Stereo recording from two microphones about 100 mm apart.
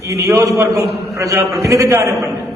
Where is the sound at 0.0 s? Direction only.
30° right (ahead or behind).